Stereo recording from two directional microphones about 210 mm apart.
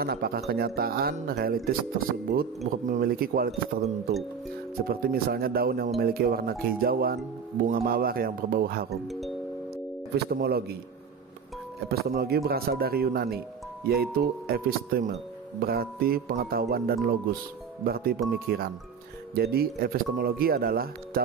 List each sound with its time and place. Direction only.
0.0 s speech: 45° right (ahead or behind)
4.8 s speech: 45° right (ahead or behind)
9.0 s speech: centre (ahead or behind)
10.1 s speech: 50° right (ahead or behind)
11.9 s speech: 45° right (ahead or behind)